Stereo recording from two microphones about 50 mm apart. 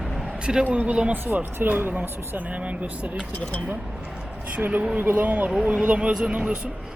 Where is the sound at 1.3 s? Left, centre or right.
Right.